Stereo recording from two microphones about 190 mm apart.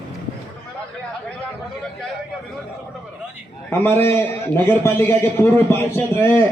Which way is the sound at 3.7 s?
10° left (ahead or behind).